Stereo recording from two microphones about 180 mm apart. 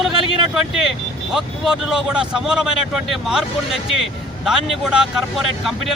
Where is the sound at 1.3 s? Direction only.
5° right (ahead or behind).